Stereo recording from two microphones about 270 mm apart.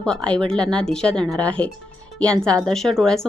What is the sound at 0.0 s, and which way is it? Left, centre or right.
Speech, centre.